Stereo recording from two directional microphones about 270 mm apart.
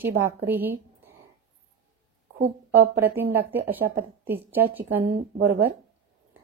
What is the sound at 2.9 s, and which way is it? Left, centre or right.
Speech, centre.